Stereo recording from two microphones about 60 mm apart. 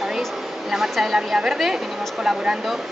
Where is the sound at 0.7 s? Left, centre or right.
Centre.